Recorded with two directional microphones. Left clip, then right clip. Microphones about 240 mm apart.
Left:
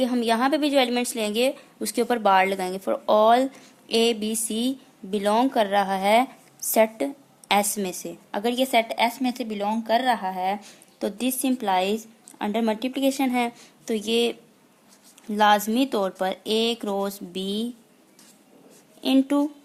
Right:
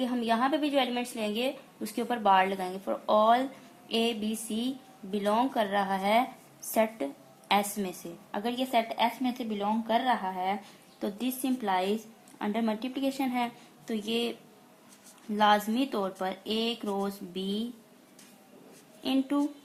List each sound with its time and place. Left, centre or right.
0.0 s a woman's voice: left
15.4 s a woman's voice: left
19.0 s a woman's voice: left